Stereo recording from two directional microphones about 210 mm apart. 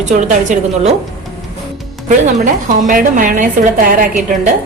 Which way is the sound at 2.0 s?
35° right (ahead or behind).